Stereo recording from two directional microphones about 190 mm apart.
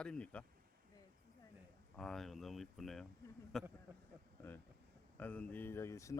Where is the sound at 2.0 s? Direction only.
Centre (ahead or behind).